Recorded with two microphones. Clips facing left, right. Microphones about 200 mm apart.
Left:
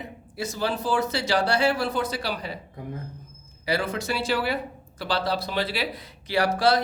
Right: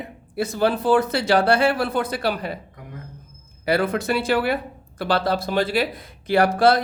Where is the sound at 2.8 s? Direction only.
30° left (ahead or behind).